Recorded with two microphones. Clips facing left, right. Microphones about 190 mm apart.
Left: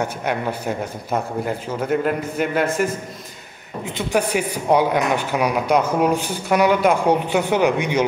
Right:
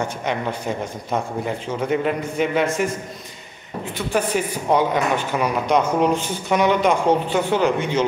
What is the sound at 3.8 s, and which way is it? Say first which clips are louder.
Speech: left 2 dB; 15° left (ahead or behind).